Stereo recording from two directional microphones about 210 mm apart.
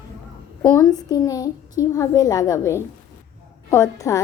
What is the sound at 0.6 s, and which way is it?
A woman's voice, 15° left (ahead or behind).